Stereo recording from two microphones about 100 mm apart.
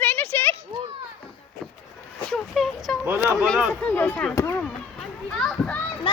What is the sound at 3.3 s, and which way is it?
Speech, 5° left (ahead or behind).